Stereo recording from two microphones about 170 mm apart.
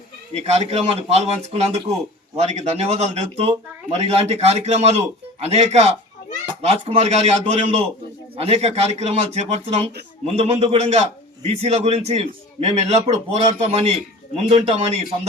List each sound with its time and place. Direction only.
0.3 s a man's voice: 40° right (ahead or behind)